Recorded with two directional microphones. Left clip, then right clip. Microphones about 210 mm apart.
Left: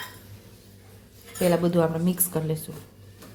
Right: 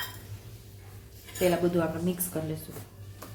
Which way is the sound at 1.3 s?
45° left (ahead or behind).